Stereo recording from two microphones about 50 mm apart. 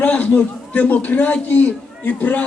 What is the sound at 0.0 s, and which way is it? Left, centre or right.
A man's voice, left.